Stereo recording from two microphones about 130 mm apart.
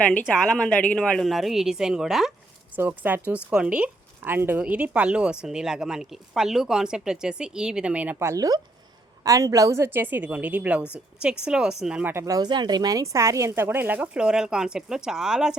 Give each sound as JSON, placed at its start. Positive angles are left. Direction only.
{"t": 0.0, "sound": "speech", "side_deg": 10}
{"t": 2.7, "sound": "speech", "side_deg": -15}
{"t": 12.2, "sound": "speech", "side_deg": -30}